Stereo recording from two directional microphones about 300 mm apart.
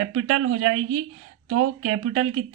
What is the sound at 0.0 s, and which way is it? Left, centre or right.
Speech, right.